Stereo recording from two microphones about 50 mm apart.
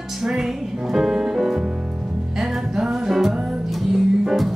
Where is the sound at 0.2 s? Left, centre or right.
Centre.